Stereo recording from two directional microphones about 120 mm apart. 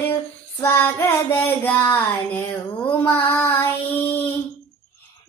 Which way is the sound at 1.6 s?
15° left (ahead or behind).